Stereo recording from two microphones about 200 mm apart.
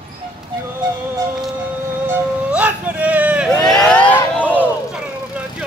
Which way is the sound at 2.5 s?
5° right (ahead or behind).